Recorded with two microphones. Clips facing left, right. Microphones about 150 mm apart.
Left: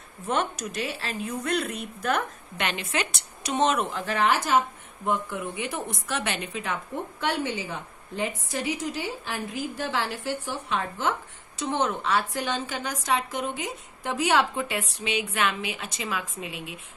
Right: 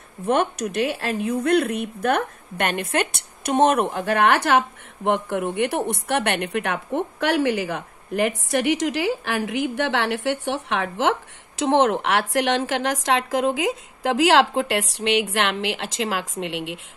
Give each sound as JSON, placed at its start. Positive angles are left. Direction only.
{"t": 0.3, "sound": "a woman's voice", "side_deg": -60}